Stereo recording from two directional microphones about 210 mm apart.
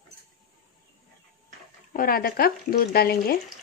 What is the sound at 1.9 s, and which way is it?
Speech, 45° left (ahead or behind).